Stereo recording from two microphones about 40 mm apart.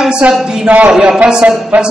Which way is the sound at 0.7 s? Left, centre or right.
Right.